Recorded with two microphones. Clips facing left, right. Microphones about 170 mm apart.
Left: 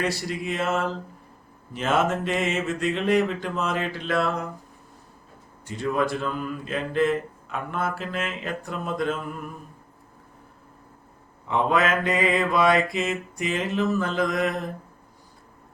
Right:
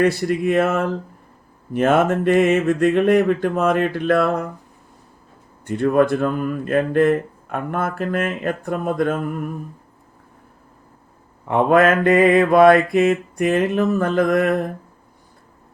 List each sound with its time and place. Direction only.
0.0 s mantra: 55° right (ahead or behind)
5.6 s speech: 55° right (ahead or behind)
11.4 s mantra: 55° right (ahead or behind)